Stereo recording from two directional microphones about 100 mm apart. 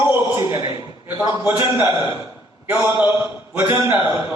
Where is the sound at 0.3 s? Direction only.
30° right (ahead or behind).